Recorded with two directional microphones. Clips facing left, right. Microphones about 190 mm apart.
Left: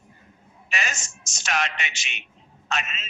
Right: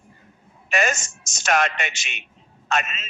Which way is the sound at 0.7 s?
50° right (ahead or behind).